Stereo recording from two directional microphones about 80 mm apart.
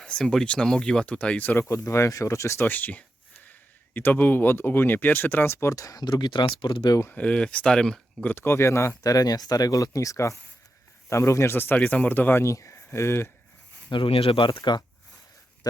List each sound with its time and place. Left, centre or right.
0.0 s speech: centre; by 6.9 s left
7.2 s speech: centre
8.3 s speech: left
9.1 s speech: left
11.8 s speech: centre; by 13.3 s left
13.9 s speech: left
14.6 s speech: left